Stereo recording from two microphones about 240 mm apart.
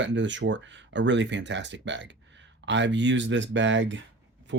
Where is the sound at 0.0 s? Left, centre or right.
Right.